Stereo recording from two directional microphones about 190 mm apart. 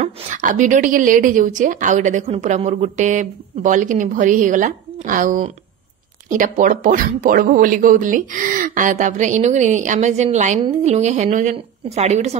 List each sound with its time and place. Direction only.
0.0 s a woman's voice: 40° right (ahead or behind)